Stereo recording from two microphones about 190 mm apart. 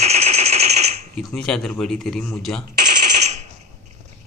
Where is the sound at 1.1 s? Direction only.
Centre (ahead or behind).